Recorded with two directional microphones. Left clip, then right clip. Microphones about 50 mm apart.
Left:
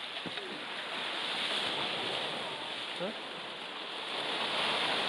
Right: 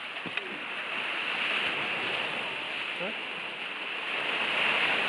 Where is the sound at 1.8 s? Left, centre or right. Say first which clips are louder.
Right 4 dB; right.